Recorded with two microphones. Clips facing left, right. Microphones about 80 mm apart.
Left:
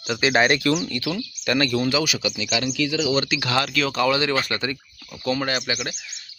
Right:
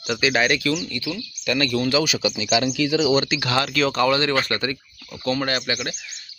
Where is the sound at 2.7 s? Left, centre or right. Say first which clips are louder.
Right 1 dB; right.